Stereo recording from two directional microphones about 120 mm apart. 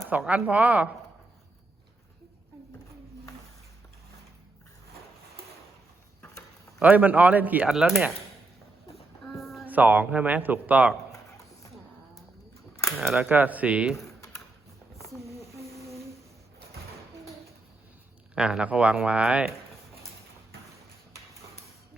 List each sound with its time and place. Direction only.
0.3 s speech: 10° right (ahead or behind)
6.8 s speech: 15° right (ahead or behind)
7.7 s speech: centre (ahead or behind)
9.2 s a sound: centre (ahead or behind)
9.6 s speech: 15° right (ahead or behind)
13.0 s speech: 5° right (ahead or behind)
13.3 s speech: 15° right (ahead or behind)
15.4 s a sound: 25° right (ahead or behind)
18.3 s speech: 10° right (ahead or behind)